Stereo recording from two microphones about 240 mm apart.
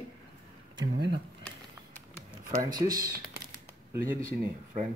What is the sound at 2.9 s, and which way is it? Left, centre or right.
Speech, right.